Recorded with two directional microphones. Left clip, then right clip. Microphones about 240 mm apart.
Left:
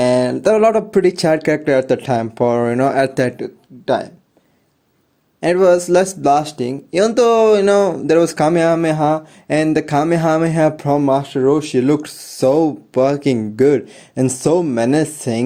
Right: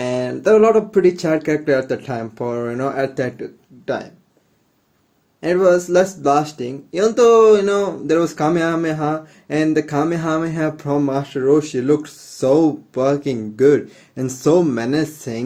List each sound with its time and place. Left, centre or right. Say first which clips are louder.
0.0 s speech: left 6 dB; left
5.4 s speech: left 2 dB; left